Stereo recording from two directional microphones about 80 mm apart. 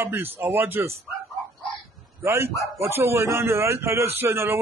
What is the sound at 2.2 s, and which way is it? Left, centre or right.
Speech, right.